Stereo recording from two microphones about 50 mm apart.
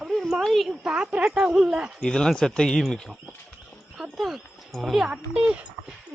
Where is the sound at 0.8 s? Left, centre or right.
Centre.